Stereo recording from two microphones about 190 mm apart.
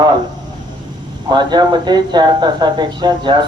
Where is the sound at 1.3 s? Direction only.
20° right (ahead or behind).